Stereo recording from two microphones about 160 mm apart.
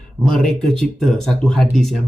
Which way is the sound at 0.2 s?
5° left (ahead or behind).